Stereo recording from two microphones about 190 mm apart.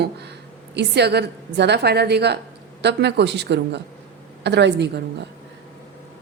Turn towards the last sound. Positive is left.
turn(degrees=-65)  # may be behind; listen again after turning